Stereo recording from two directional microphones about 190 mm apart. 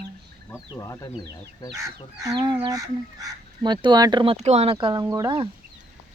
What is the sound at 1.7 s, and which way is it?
Chicken, 15° right (ahead or behind).